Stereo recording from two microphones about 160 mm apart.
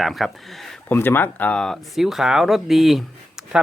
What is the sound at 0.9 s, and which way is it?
Speech, 15° left (ahead or behind).